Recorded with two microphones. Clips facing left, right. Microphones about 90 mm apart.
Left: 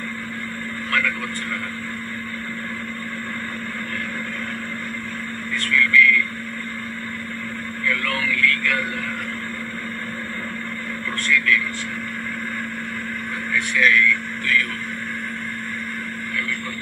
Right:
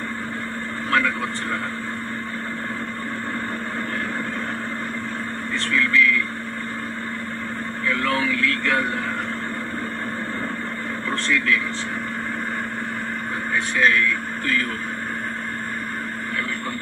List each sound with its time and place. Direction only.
5.5 s vehicle: 30° right (ahead or behind)
7.8 s speech: 30° right (ahead or behind)
11.2 s speech: 30° right (ahead or behind)
13.5 s speech: 35° right (ahead or behind)